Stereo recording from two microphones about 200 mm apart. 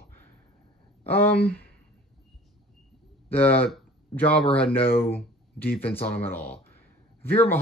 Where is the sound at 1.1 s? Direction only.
10° left (ahead or behind).